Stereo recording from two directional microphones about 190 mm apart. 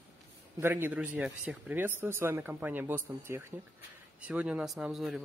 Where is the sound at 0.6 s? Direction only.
10° right (ahead or behind).